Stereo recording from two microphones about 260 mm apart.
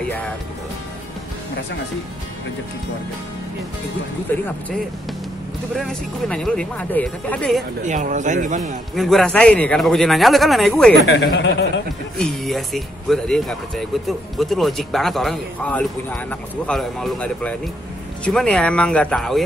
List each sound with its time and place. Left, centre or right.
5.8 s speech: centre
7.8 s a man's voice: right
8.9 s speech: centre
11.1 s a man's voice: left
12.2 s speech: centre